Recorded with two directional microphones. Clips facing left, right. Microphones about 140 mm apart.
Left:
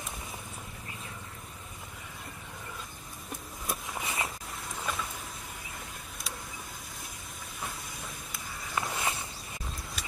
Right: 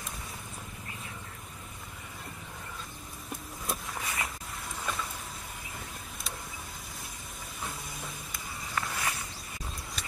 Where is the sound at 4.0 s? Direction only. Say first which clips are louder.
Left 4 dB; 25° left (ahead or behind).